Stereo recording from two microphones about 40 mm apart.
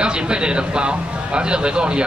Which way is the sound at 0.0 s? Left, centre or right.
Right.